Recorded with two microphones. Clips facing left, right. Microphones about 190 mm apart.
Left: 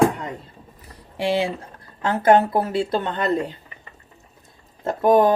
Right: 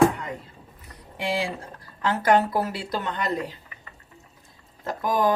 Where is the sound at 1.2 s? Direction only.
25° left (ahead or behind).